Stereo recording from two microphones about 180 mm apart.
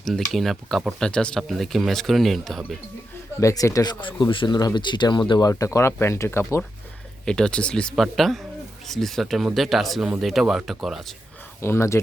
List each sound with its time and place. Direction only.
0.0 s speech: centre (ahead or behind)
3.4 s speech: 20° left (ahead or behind); by 11.0 s centre (ahead or behind)
11.6 s speech: 15° left (ahead or behind)